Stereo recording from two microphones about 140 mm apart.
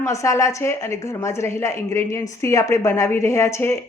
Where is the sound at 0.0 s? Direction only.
20° left (ahead or behind).